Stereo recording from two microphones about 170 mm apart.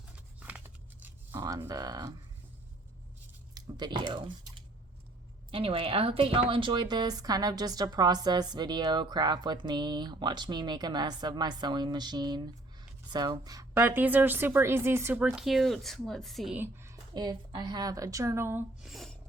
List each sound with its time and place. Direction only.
0.3 s scissors: 10° right (ahead or behind)
1.0 s speech: 20° right (ahead or behind)
3.5 s a woman's voice: 25° right (ahead or behind); by 16.6 s centre (ahead or behind)
16.6 s a woman's voice: 15° right (ahead or behind)
18.8 s speech: centre (ahead or behind)